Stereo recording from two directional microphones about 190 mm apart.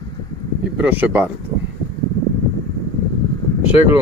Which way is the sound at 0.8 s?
10° right (ahead or behind).